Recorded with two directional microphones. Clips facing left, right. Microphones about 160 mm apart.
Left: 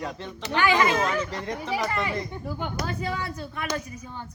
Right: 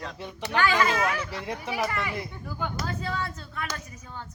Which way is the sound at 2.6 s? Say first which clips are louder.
Even; 15° left (ahead or behind).